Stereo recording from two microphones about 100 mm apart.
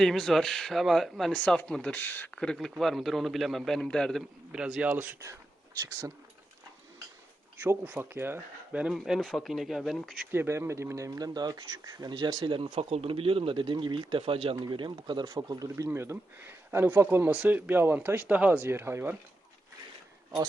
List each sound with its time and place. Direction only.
0.0 s speech: 5° left (ahead or behind); by 2.4 s 20° left (ahead or behind)
2.4 s speech: 5° left (ahead or behind)
4.5 s speech: 5° right (ahead or behind)
4.9 s speech: 15° right (ahead or behind)
7.6 s speech: 20° right (ahead or behind)
8.9 s speech: 5° right (ahead or behind)
10.3 s speech: 25° right (ahead or behind); by 12.5 s 45° right (ahead or behind)
12.5 s speech: 70° right (ahead or behind)
14.6 s speech: 50° right (ahead or behind)
15.9 s speech: 25° right (ahead or behind)